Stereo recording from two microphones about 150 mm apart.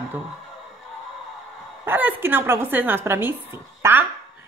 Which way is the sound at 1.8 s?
15° right (ahead or behind).